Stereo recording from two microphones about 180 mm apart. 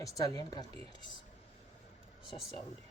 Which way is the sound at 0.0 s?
20° left (ahead or behind).